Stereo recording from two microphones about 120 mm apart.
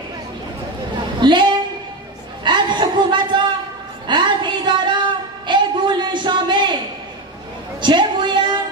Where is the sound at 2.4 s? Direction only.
40° right (ahead or behind).